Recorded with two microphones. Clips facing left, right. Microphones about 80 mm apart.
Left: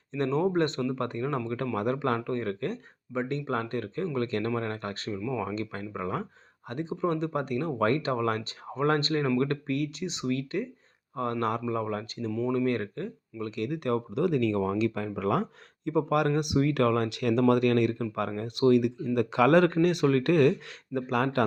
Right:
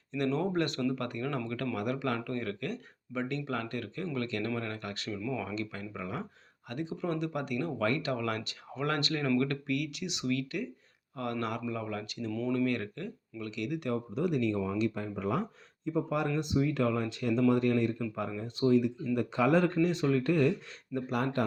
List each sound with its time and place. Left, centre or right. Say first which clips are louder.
0.1 s speech: left 4 dB; left
12.3 s speech: left 3 dB; centre
12.5 s speech: left 3 dB; left
14.2 s speech: left 4 dB; left
15.9 s speech: left 5 dB; left